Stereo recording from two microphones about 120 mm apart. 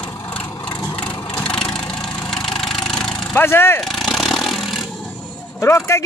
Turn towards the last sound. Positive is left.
turn(degrees=25)  # may be behind; listen again after turning